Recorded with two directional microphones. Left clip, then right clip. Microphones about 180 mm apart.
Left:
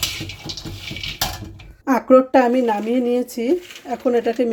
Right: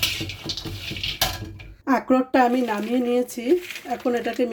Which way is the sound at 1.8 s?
10° left (ahead or behind).